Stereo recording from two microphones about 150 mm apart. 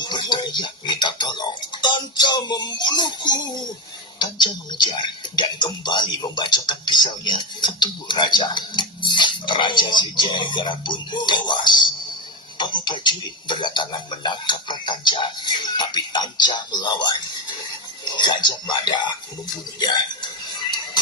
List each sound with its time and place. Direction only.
0.0 s dishes: 30° left (ahead or behind)
4.2 s speech: 30° left (ahead or behind)
18.2 s speech: 30° left (ahead or behind)